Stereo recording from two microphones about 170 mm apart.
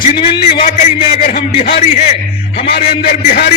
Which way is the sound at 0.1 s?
30° left (ahead or behind).